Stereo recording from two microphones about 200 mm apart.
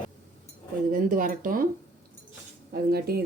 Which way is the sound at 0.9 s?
45° right (ahead or behind).